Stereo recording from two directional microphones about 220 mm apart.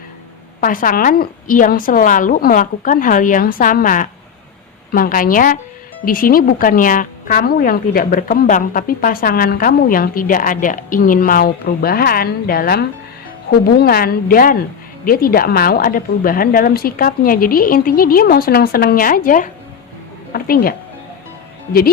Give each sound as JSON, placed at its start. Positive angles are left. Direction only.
{"t": 0.6, "sound": "a woman's voice", "side_deg": 40}